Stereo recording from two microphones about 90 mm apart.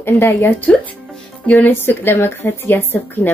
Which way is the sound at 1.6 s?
25° left (ahead or behind).